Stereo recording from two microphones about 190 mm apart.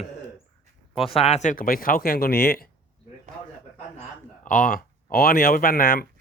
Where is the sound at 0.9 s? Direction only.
30° left (ahead or behind); by 2.6 s 50° left (ahead or behind).